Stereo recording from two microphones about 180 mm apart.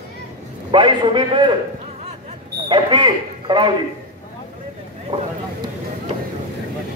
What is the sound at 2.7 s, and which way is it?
Speech, 25° right (ahead or behind).